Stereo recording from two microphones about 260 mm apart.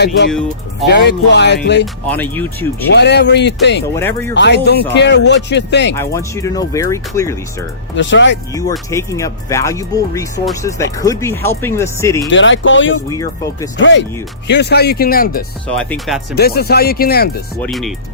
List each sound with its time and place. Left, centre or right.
0.3 s speech: centre
0.9 s speech: left
2.0 s speech: centre
2.9 s speech: left
6.0 s speech: centre
7.9 s speech: left
8.9 s speech: centre
12.3 s speech: left
13.1 s speech: centre
13.7 s speech: left
15.6 s speech: centre
16.3 s speech: left
17.6 s speech: centre